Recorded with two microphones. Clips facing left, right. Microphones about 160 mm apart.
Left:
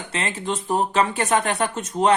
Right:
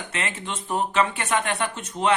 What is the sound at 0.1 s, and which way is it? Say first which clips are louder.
A man's voice: left 6 dB; 35° left (ahead or behind).